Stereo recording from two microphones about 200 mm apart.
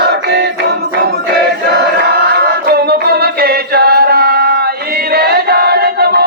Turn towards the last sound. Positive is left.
turn(degrees=-50)  # may be behind; listen again after turning